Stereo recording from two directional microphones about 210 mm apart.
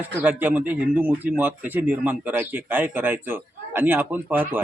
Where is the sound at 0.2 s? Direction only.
10° right (ahead or behind).